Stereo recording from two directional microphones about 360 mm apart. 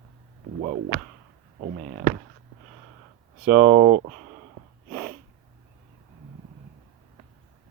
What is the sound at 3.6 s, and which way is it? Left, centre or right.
Speech, right.